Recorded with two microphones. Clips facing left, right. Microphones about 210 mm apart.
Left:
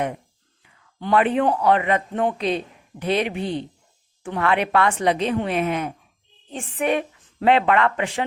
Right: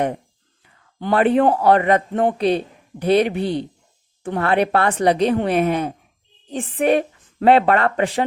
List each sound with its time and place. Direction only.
0.6 s speech: 40° right (ahead or behind)